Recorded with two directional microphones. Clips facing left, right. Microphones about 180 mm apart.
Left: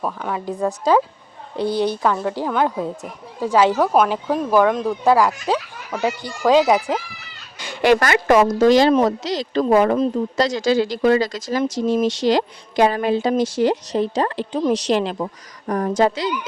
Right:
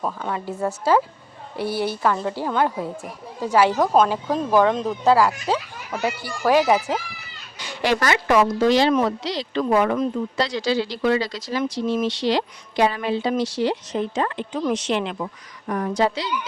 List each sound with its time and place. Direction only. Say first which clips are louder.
0.0 s a woman's voice: left 2 dB; 10° left (ahead or behind)
7.6 s a woman's voice: left 6 dB; 55° left (ahead or behind)